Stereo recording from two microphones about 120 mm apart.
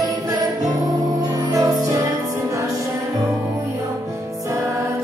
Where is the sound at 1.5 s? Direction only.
30° right (ahead or behind).